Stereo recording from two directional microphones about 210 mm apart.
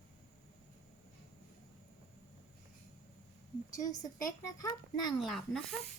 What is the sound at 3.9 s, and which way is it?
A child's voice, 15° left (ahead or behind).